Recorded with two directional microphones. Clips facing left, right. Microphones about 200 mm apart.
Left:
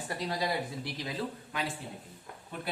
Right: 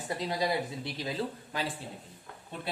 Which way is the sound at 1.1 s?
30° right (ahead or behind).